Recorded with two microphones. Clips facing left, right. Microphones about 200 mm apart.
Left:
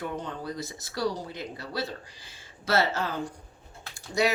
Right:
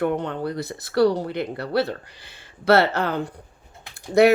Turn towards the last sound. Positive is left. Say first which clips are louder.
# right 10 dB
turn(degrees=-60)  # may be behind; listen again after turning